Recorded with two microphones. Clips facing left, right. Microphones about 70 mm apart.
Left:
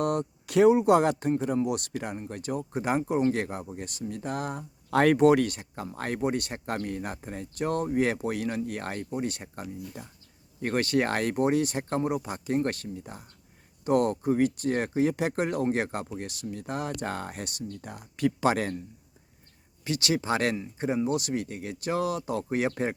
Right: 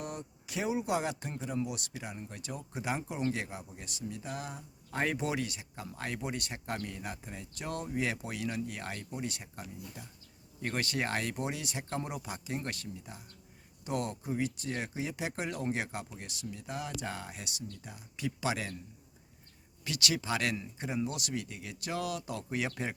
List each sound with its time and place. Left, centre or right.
0.0 s speech: left
2.1 s speech: left
4.9 s speech: left
19.8 s speech: left